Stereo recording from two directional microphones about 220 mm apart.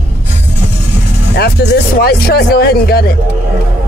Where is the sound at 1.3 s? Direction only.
50° left (ahead or behind).